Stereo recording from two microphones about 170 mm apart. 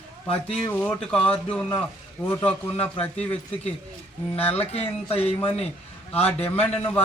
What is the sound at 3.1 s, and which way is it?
Speech, 40° left (ahead or behind).